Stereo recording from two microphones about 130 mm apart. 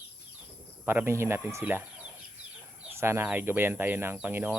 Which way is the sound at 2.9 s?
20° right (ahead or behind).